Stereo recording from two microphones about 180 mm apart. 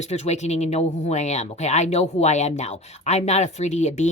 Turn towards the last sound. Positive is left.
turn(degrees=40)  # may be behind; listen again after turning